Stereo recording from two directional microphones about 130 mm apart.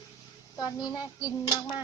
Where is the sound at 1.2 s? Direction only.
30° left (ahead or behind).